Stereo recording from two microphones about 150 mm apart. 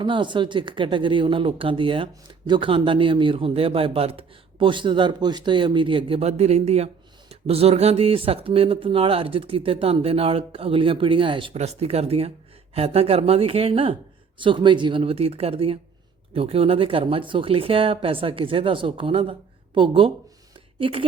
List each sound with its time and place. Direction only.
0.0 s a man's voice: 30° right (ahead or behind)
11.5 s a man's voice: 45° right (ahead or behind)